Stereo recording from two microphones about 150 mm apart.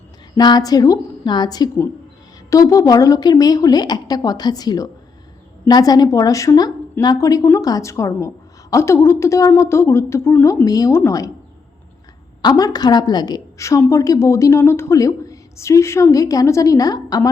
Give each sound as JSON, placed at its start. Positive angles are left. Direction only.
{"t": 0.3, "sound": "a woman's voice", "side_deg": 30}
{"t": 12.4, "sound": "a woman's voice", "side_deg": 25}